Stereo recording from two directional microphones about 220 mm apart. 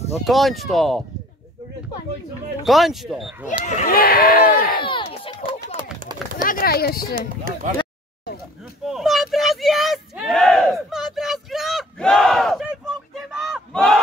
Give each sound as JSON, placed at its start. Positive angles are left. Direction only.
{"t": 0.2, "sound": "speech", "side_deg": 0}
{"t": 2.6, "sound": "speech", "side_deg": 0}
{"t": 3.6, "sound": "speech", "side_deg": 40}
{"t": 4.8, "sound": "a sound", "side_deg": 25}
{"t": 6.3, "sound": "speech", "side_deg": 40}
{"t": 8.8, "sound": "a sound", "side_deg": 0}